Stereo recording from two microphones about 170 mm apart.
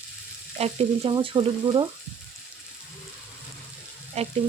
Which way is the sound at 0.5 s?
35° right (ahead or behind).